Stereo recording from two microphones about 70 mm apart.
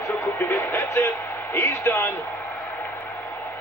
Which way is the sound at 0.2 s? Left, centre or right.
Left.